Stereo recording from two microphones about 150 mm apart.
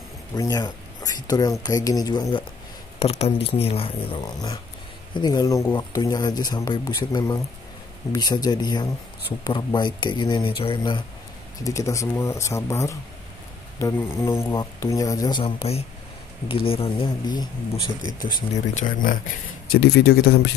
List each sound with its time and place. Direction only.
0.3 s speech: 25° left (ahead or behind)
3.0 s speech: 45° left (ahead or behind)
4.2 s speech: 25° left (ahead or behind)
11.6 s speech: 20° left (ahead or behind)
18.2 s speech: 60° left (ahead or behind)
19.7 s speech: 90° left